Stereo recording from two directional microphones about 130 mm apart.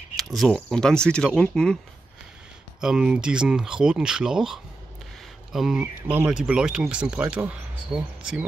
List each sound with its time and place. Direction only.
0.2 s speech: centre (ahead or behind)
2.8 s speech: 5° right (ahead or behind)